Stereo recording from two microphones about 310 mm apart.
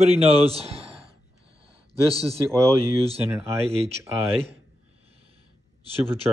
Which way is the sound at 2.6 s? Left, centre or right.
Centre.